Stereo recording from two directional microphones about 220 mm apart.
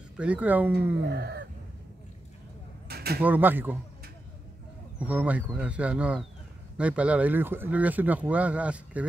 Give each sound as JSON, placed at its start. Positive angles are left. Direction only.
{"t": 0.2, "sound": "speech", "side_deg": -5}
{"t": 1.0, "sound": "fowl", "side_deg": -45}
{"t": 2.9, "sound": "a sound", "side_deg": -45}
{"t": 3.2, "sound": "speech", "side_deg": -10}
{"t": 4.9, "sound": "speech", "side_deg": -5}